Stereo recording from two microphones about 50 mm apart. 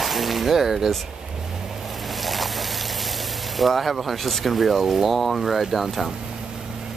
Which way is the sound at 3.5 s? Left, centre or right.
Centre.